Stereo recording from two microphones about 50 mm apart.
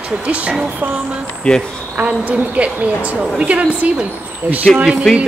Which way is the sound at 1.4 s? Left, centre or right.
Centre.